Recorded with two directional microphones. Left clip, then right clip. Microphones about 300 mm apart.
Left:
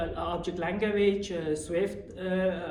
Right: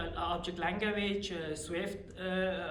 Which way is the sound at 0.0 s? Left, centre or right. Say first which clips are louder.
Left 4 dB; centre.